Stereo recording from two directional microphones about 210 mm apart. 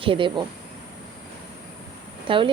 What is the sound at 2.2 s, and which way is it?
Speech, 25° right (ahead or behind).